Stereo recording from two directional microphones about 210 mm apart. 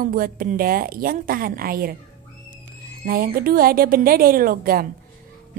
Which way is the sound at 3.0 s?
45° right (ahead or behind).